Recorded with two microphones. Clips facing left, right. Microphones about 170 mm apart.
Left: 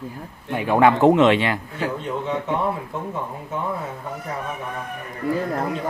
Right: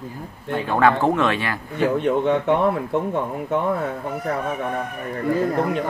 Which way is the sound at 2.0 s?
65° right (ahead or behind).